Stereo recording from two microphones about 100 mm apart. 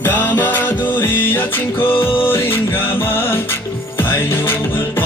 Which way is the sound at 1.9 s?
65° left (ahead or behind).